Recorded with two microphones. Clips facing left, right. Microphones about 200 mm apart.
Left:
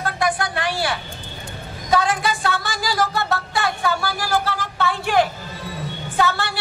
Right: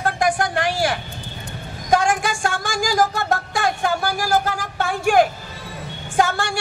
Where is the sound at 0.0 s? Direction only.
45° right (ahead or behind).